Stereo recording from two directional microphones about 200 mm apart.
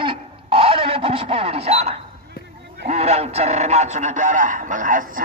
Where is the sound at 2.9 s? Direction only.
30° right (ahead or behind).